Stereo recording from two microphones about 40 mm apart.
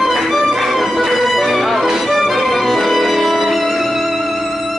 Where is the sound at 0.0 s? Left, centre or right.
Centre.